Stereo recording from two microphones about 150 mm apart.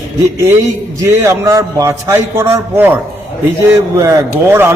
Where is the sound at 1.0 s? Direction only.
20° right (ahead or behind).